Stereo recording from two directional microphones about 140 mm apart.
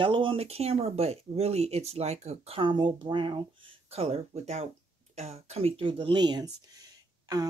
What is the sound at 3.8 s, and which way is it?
Speech, 45° right (ahead or behind).